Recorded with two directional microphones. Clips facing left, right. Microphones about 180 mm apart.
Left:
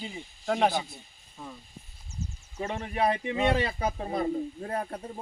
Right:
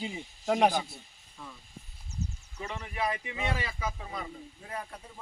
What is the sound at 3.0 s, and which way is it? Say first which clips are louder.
Speech: left 7 dB; 30° left (ahead or behind).